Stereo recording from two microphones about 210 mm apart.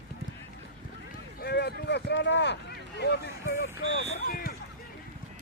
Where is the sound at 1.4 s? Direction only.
50° left (ahead or behind).